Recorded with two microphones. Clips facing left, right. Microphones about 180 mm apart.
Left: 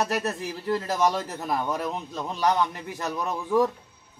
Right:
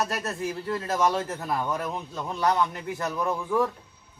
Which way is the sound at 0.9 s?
15° left (ahead or behind).